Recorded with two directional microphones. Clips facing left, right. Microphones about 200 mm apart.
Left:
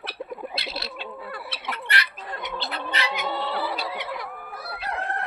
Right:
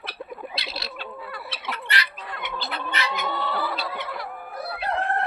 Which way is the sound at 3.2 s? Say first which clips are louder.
Even; 30° left (ahead or behind).